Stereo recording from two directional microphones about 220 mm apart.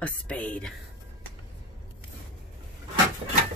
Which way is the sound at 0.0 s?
5° left (ahead or behind).